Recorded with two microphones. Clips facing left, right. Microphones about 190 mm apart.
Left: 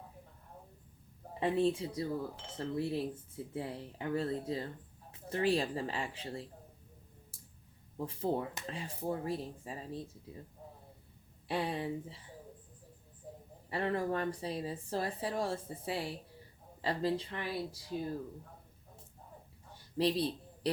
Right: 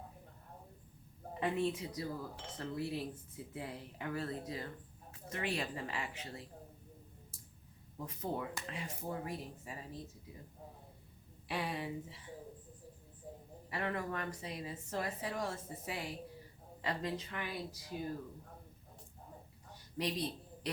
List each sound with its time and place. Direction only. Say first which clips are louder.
1.4 s speech: left 5 dB; 30° left (ahead or behind)
7.9 s speech: left 6 dB; 30° left (ahead or behind)
11.4 s speech: left 4 dB; 30° left (ahead or behind)
13.7 s speech: left 5 dB; 30° left (ahead or behind)
20.0 s speech: left 6 dB; 30° left (ahead or behind)